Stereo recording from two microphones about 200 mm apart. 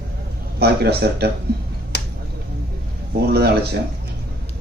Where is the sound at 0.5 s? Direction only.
55° right (ahead or behind).